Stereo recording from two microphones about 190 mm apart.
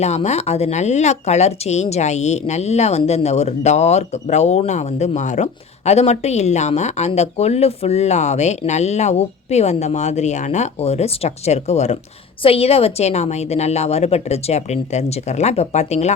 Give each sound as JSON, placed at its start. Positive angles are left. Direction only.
{"t": 0.0, "sound": "speech", "side_deg": 35}